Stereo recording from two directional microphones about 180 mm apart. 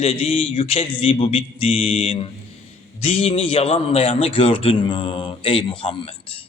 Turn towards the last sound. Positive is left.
turn(degrees=30)  # may be behind; listen again after turning